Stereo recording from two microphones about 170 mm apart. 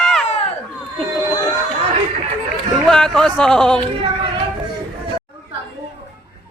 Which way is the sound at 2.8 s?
5° left (ahead or behind).